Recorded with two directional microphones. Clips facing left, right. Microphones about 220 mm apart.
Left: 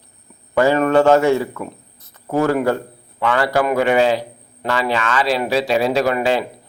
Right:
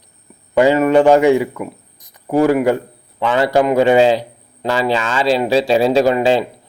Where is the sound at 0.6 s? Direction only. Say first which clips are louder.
Right 3 dB; 15° right (ahead or behind).